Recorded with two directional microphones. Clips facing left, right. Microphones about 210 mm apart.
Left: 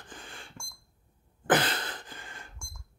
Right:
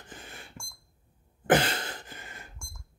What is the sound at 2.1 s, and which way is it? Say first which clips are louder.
Alarm clock: even; 20° right (ahead or behind).